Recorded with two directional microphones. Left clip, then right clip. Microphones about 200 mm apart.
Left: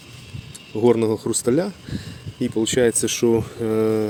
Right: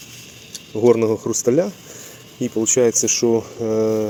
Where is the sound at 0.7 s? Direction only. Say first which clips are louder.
Right 3 dB; 10° left (ahead or behind).